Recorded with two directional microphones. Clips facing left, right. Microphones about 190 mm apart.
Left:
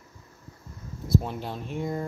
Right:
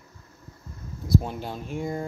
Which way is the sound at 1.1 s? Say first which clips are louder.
Right 1 dB; centre (ahead or behind).